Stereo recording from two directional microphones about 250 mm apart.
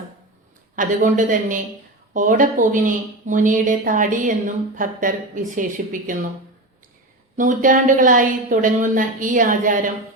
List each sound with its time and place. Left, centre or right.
0.8 s a woman's voice: right
7.3 s a woman's voice: right